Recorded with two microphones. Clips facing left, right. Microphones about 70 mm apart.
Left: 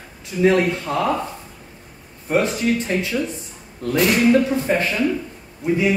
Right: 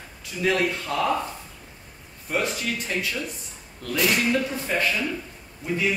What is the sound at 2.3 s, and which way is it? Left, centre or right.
Speech, left.